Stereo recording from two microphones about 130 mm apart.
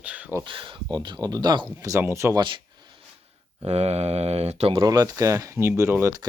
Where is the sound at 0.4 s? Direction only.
40° right (ahead or behind).